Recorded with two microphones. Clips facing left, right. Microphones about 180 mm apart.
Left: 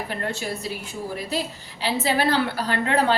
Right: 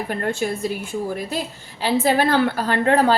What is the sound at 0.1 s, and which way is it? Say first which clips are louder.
Speech: right 5 dB; 50° right (ahead or behind).